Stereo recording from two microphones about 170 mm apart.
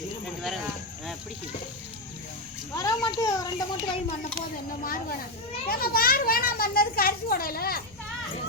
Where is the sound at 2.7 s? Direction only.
20° left (ahead or behind).